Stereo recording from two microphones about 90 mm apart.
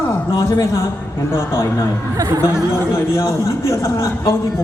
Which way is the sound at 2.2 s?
45° right (ahead or behind).